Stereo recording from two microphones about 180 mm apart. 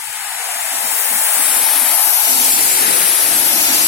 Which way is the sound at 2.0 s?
20° left (ahead or behind).